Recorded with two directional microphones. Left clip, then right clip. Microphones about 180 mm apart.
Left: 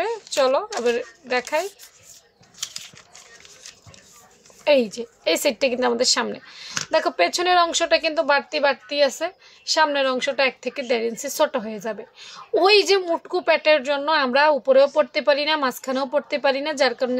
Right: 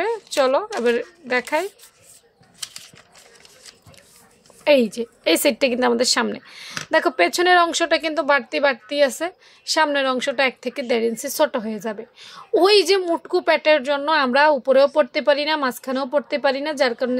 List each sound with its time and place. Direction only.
0.0 s speech: 25° right (ahead or behind)
4.6 s speech: 25° right (ahead or behind)